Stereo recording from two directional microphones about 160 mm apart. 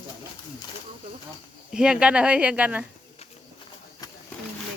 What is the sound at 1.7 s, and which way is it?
Speech, 5° right (ahead or behind).